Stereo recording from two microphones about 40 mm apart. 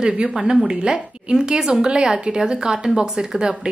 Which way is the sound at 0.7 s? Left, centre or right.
Right.